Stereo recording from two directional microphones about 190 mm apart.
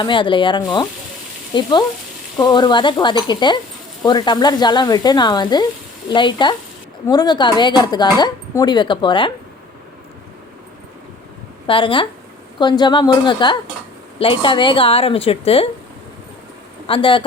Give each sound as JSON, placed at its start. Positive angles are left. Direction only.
{"t": 0.0, "sound": "a woman's voice", "side_deg": 25}
{"t": 11.6, "sound": "a woman's voice", "side_deg": 25}
{"t": 16.8, "sound": "speech", "side_deg": 25}